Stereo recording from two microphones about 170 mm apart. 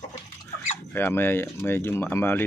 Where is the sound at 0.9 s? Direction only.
10° left (ahead or behind).